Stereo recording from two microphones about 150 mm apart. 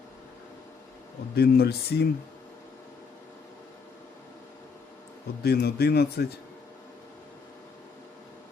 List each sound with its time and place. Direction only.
1.4 s a man's voice: 90° left
5.4 s a man's voice: 90° left